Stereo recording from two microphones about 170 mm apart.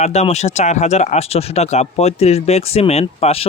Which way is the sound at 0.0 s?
40° left (ahead or behind).